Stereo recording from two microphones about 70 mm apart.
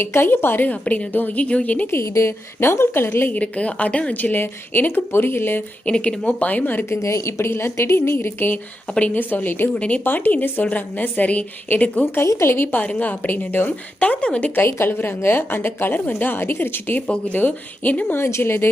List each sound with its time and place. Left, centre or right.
0.0 s a woman's voice: left
1.9 s a woman's voice: left
3.3 s a woman's voice: centre
5.8 s a woman's voice: centre
6.9 s a woman's voice: left
8.9 s a woman's voice: centre
12.0 s a woman's voice: left
12.7 s a woman's voice: left
14.7 s a woman's voice: left
18.2 s a woman's voice: left